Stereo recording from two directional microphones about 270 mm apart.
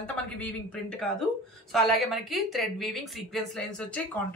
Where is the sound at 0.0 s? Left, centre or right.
Centre.